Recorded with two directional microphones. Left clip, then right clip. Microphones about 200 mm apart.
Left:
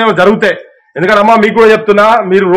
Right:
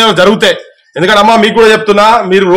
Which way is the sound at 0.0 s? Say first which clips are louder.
Right 1 dB; 20° right (ahead or behind).